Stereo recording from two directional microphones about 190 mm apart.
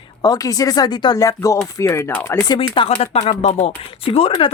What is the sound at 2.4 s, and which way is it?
Speech, 25° left (ahead or behind).